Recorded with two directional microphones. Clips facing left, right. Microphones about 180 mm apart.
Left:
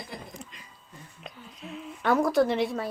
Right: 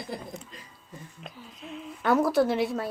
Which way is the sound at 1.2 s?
Centre (ahead or behind).